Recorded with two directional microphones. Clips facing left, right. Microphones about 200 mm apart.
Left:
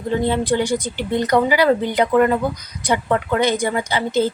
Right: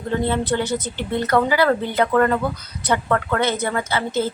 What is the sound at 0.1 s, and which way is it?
Speech, 15° left (ahead or behind).